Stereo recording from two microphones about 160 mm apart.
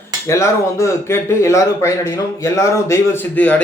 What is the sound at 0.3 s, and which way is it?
Speech, 20° left (ahead or behind).